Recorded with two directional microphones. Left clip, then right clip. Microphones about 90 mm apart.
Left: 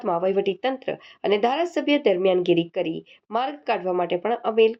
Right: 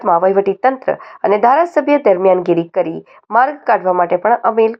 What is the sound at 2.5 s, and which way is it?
Speech, 90° right.